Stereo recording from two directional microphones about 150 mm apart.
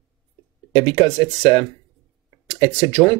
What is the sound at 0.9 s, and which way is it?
Speech, 30° right (ahead or behind).